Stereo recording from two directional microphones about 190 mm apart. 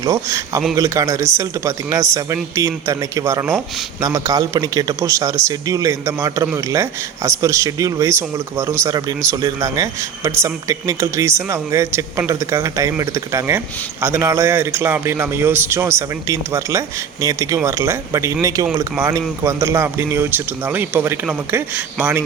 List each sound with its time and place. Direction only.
0.8 s a man's voice: 15° right (ahead or behind)